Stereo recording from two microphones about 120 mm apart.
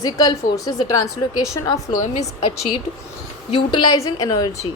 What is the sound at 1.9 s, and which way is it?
Speech, 90° left.